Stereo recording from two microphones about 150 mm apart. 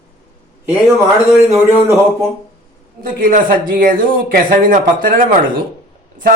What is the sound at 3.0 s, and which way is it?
A man's voice, 65° right (ahead or behind).